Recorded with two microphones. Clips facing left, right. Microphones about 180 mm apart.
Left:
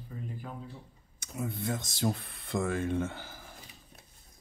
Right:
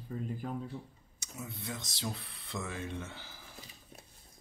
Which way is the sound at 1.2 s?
50° left (ahead or behind).